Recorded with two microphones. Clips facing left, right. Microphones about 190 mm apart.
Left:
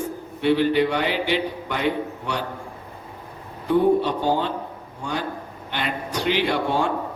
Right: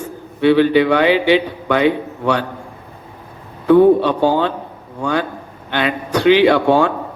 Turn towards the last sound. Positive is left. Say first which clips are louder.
# right 10 dB
turn(degrees=-85)